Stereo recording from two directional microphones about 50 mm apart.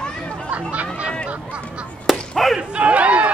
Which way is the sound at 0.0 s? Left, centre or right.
Centre.